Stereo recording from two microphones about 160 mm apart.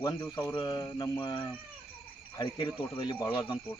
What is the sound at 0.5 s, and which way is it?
Mantra, 25° left (ahead or behind).